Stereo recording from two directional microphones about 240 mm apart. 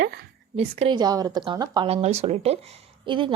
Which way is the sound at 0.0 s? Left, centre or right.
Right.